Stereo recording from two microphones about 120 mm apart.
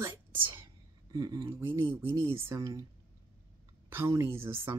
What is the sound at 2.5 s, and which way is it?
Speech, 30° right (ahead or behind).